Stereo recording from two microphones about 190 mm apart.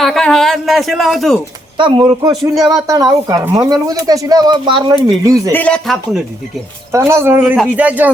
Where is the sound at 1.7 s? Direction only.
25° right (ahead or behind).